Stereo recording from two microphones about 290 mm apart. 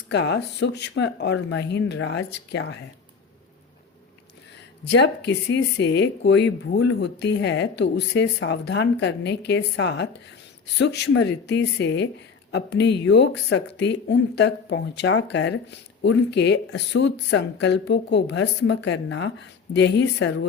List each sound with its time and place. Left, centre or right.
0.1 s speech: left
4.9 s speech: left